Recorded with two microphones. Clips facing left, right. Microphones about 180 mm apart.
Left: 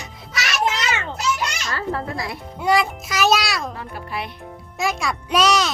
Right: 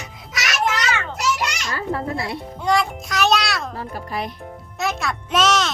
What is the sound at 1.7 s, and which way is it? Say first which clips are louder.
Speech: right 1 dB; 15° right (ahead or behind).